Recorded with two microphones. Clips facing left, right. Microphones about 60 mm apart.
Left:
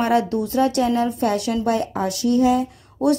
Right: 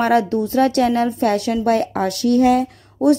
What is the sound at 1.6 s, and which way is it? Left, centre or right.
Speech, right.